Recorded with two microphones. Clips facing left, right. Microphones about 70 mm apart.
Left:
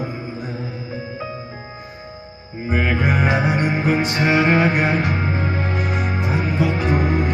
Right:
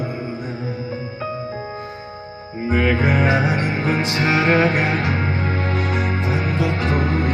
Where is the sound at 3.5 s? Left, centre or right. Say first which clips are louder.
Left 2 dB; left.